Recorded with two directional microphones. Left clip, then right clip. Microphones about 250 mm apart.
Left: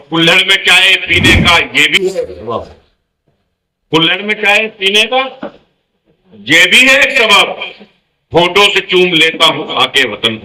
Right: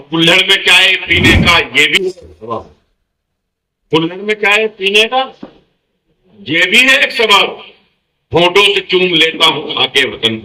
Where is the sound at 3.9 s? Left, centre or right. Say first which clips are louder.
Left 3 dB; left.